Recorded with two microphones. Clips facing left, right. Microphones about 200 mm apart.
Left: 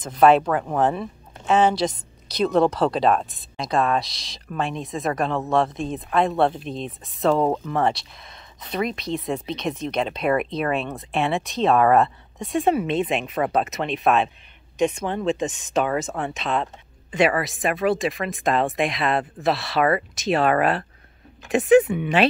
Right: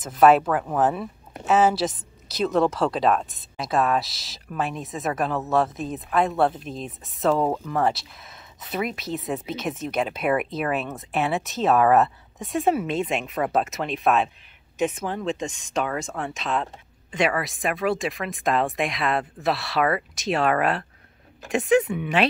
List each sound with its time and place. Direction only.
0.0 s speech: 5° right (ahead or behind)